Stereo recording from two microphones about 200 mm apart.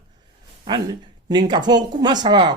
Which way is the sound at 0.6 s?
20° right (ahead or behind).